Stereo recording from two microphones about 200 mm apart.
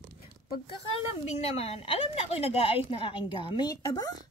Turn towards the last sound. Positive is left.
turn(degrees=20)  # may be behind; listen again after turning